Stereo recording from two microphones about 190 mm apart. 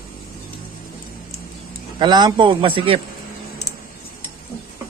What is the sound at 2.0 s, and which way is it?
A man's voice, 20° right (ahead or behind).